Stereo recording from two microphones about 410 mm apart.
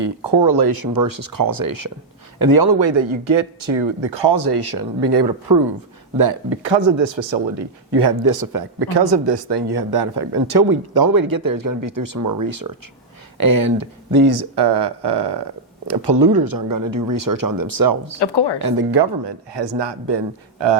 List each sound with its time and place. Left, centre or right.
0.0 s speech: right
6.1 s speech: right
8.1 s speech: right
18.2 s speech: left
18.9 s speech: right
19.5 s speech: right